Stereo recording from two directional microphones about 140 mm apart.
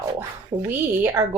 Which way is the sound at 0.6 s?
15° right (ahead or behind).